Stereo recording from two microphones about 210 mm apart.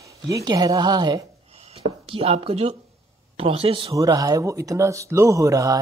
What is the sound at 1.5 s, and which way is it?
Speech, 30° right (ahead or behind).